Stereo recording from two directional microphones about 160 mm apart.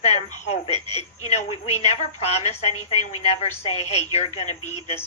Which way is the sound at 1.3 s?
45° left (ahead or behind).